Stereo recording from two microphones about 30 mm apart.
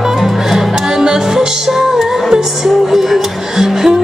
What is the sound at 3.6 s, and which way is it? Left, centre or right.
Music, centre.